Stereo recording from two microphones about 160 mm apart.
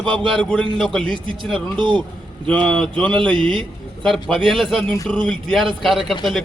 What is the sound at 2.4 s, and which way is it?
A man's voice, 10° left (ahead or behind).